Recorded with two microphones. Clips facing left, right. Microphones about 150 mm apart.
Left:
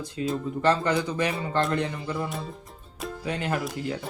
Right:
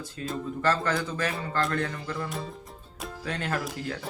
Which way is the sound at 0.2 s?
10° left (ahead or behind).